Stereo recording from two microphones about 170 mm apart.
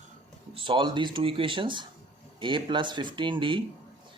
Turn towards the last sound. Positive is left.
turn(degrees=-30)  # may be behind; listen again after turning